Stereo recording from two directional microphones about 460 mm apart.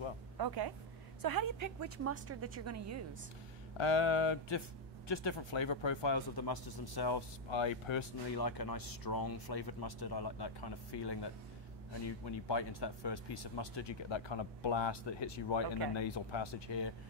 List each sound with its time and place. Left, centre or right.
0.4 s a woman's voice: right
3.7 s speech: left
8.4 s speech: left